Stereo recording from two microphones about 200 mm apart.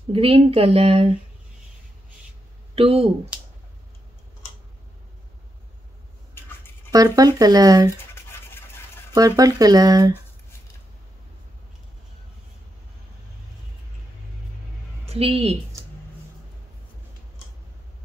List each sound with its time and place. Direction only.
0.1 s speech: 30° right (ahead or behind)
2.7 s speech: 30° right (ahead or behind)
6.9 s speech: 20° right (ahead or behind)
8.1 s scratch: 10° left (ahead or behind)
9.1 s speech: 20° right (ahead or behind)
15.0 s speech: 30° right (ahead or behind)